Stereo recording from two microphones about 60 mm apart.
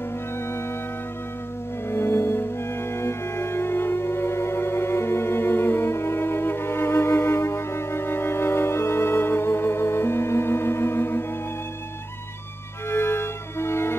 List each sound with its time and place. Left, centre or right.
1.9 s music: left
12.9 s music: left